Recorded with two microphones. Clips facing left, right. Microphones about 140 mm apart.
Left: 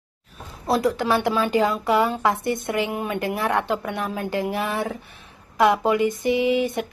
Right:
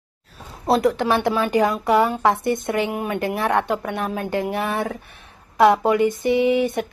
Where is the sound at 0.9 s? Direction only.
20° right (ahead or behind).